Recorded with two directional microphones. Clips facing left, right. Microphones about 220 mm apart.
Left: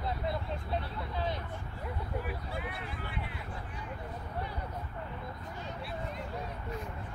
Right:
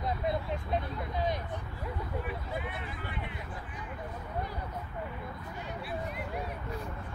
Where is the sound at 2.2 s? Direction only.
Centre (ahead or behind).